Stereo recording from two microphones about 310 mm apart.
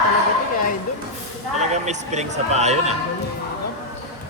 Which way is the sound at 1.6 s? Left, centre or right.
Right.